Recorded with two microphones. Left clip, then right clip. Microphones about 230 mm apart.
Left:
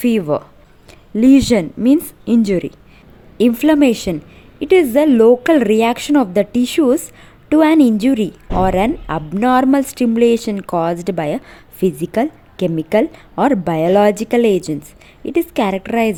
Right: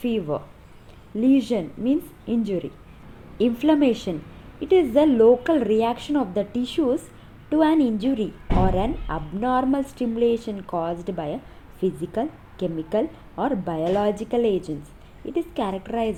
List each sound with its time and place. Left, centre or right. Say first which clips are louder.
0.0 s a woman's voice: left 9 dB; left